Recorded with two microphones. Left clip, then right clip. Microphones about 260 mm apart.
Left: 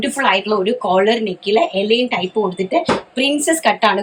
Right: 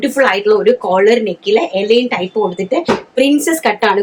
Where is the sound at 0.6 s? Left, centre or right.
Centre.